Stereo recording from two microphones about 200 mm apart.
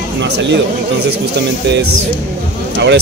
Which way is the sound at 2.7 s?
65° right (ahead or behind).